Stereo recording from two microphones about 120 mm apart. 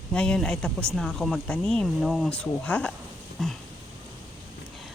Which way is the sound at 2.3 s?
10° left (ahead or behind).